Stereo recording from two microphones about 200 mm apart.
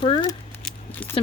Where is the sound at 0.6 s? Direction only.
5° left (ahead or behind).